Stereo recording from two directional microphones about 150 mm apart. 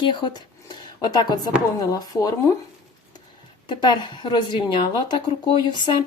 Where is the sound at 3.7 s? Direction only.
30° left (ahead or behind).